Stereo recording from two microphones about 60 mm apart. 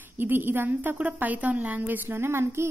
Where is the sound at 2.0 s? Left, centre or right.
Right.